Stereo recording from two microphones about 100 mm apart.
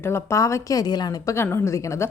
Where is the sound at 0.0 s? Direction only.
25° left (ahead or behind).